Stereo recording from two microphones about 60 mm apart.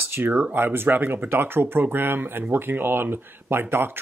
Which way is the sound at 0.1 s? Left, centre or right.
Right.